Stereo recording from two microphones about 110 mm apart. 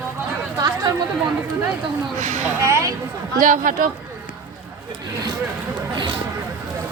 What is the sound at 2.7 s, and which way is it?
Speech, 25° right (ahead or behind).